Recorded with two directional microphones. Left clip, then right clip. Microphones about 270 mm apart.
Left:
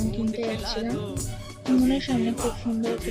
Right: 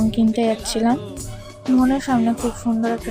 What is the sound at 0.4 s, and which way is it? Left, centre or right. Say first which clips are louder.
Speech: right 9 dB; centre.